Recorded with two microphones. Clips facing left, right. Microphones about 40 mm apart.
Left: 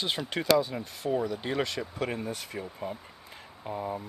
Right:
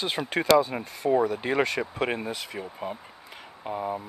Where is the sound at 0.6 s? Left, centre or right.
Right.